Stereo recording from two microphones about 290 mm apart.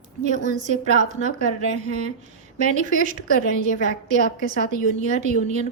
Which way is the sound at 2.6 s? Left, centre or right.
Right.